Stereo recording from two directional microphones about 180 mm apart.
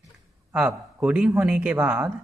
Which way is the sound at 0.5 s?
10° right (ahead or behind).